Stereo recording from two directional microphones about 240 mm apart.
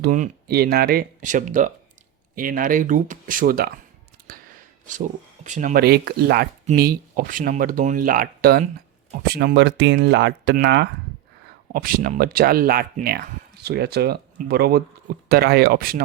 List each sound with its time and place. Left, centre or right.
0.0 s speech: right
4.2 s a sound: right
4.9 s speech: right